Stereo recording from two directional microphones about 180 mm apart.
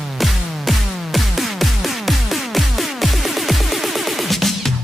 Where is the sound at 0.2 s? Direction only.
Centre (ahead or behind).